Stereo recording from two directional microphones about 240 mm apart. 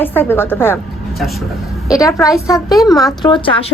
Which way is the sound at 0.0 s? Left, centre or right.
Centre.